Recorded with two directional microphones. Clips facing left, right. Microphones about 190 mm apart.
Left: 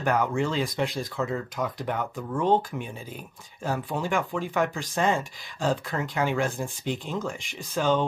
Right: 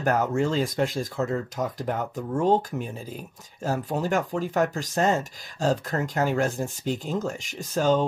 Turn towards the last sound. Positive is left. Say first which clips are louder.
# right 2 dB
turn(degrees=-40)  # may be behind; listen again after turning